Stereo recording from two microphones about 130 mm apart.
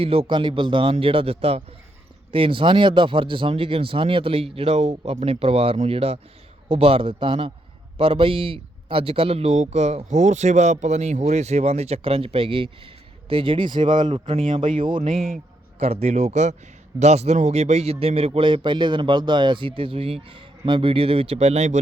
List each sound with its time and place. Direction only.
0.0 s a man's voice: 45° right (ahead or behind)
15.1 s speech: centre (ahead or behind)
15.8 s a man's voice: 55° right (ahead or behind)